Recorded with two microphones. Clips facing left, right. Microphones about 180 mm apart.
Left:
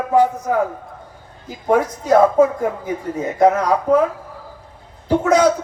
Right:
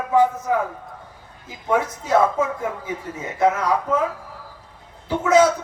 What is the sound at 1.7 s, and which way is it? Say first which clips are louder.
Speech: left 5 dB; 45° left (ahead or behind).